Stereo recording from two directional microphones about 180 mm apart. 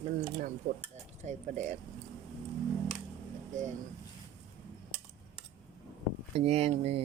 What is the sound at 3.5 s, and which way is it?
Speech, 40° right (ahead or behind).